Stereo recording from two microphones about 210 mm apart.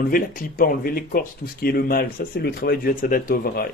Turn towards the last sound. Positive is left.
turn(degrees=45)  # may be behind; listen again after turning